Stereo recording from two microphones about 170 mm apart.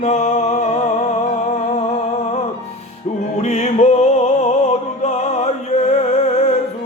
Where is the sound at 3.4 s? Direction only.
40° left (ahead or behind).